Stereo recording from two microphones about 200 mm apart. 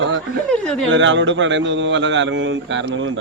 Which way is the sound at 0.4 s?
5° left (ahead or behind).